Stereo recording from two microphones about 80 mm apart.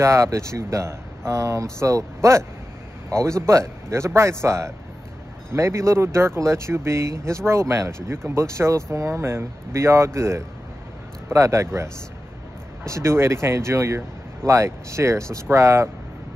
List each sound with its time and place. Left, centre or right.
0.0 s speech: right